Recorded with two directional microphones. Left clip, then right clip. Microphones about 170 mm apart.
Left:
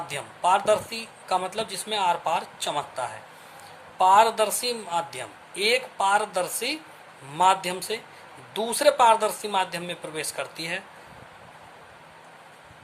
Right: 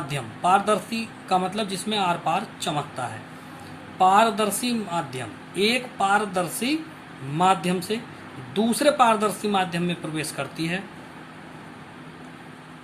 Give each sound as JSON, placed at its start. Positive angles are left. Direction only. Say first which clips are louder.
{"t": 0.1, "sound": "a man's voice", "louder": "right 2 dB", "side_deg": 30}